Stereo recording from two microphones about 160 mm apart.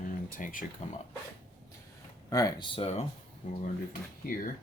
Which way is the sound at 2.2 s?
25° left (ahead or behind).